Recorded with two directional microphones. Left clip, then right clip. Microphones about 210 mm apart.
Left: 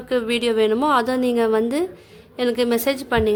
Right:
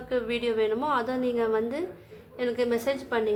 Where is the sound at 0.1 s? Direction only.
50° left (ahead or behind).